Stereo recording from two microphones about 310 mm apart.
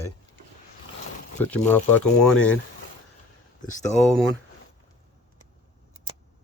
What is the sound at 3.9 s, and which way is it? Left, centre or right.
Speech, centre.